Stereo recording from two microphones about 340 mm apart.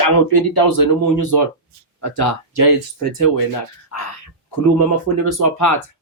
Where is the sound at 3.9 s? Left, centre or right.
Left.